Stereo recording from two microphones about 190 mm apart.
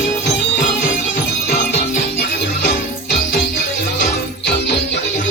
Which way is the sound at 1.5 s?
40° left (ahead or behind).